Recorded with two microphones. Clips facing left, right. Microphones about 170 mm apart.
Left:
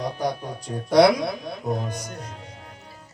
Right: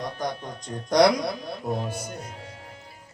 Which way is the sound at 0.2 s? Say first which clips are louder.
Left 4 dB; 10° left (ahead or behind).